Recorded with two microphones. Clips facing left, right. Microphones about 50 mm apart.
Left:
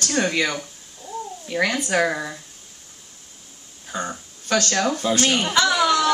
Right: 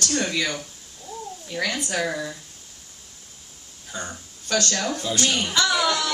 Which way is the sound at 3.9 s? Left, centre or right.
Left.